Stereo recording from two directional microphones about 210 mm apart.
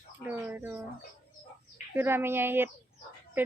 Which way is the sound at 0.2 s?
5° right (ahead or behind).